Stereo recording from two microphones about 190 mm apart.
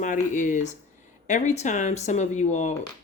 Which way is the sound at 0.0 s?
40° left (ahead or behind).